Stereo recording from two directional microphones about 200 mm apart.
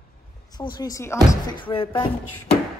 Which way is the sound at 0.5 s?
20° left (ahead or behind).